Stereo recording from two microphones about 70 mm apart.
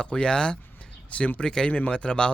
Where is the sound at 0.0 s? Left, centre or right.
Centre.